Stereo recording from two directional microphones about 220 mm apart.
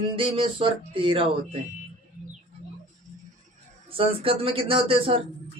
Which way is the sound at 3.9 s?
25° right (ahead or behind).